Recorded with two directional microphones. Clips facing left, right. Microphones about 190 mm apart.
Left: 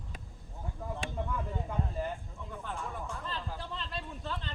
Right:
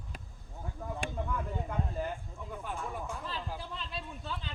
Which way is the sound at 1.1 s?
Centre (ahead or behind).